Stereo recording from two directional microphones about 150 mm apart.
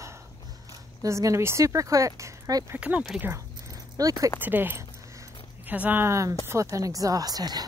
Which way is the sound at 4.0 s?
25° right (ahead or behind).